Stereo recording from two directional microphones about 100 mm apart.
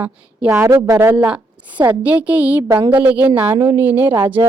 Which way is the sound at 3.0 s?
15° right (ahead or behind).